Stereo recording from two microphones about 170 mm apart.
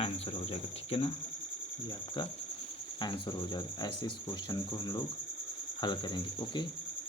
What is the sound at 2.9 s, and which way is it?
Speech, 25° left (ahead or behind).